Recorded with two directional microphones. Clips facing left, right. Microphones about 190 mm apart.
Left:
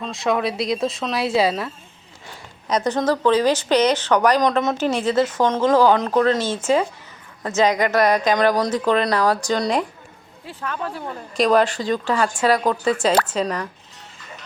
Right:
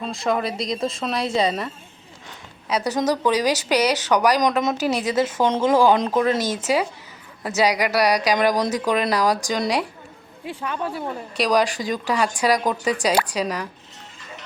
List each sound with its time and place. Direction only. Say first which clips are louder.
0.0 s a woman's voice: left 2 dB; centre (ahead or behind); by 5.4 s 20° right (ahead or behind)
5.4 s a woman's voice: even; 10° right (ahead or behind)